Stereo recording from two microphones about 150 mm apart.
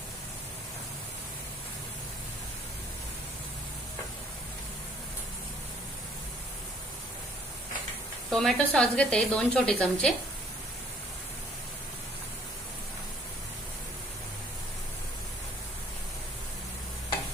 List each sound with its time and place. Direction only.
8.3 s a woman's voice: 5° left (ahead or behind)